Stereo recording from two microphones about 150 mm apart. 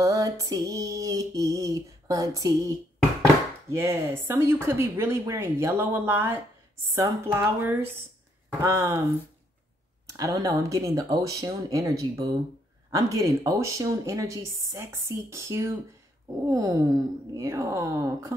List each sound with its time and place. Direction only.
0.0 s speech: 20° right (ahead or behind)
3.7 s speech: 15° right (ahead or behind)
10.1 s speech: 25° right (ahead or behind)